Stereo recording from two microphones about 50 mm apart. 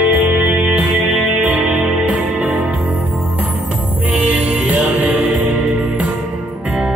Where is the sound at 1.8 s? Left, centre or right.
Right.